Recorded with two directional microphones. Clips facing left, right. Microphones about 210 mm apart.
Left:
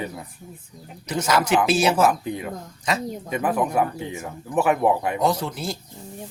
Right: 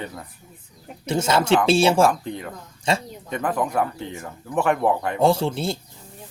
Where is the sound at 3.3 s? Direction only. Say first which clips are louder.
Left 1 dB; 10° left (ahead or behind).